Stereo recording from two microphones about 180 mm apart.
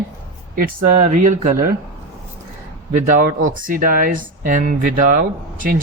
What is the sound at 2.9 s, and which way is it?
Speech, 50° right (ahead or behind).